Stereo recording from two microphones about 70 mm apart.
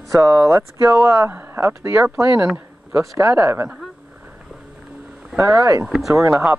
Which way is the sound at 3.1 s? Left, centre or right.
Right.